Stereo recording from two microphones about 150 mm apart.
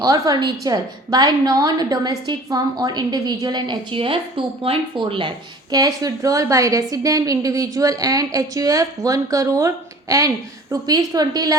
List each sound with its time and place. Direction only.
0.0 s a woman's voice: 25° right (ahead or behind)